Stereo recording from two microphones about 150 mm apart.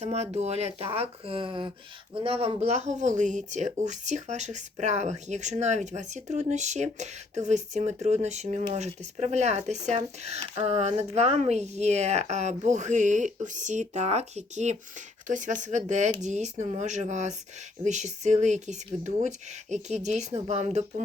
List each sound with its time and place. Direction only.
0.0 s speech: 45° right (ahead or behind)